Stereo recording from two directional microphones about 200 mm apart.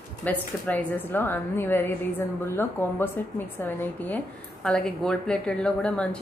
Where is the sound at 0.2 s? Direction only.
10° left (ahead or behind).